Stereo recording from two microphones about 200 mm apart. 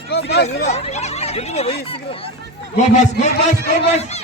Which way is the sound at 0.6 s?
35° left (ahead or behind).